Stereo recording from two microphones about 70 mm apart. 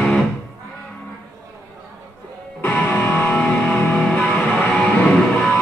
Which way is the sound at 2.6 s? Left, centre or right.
Left.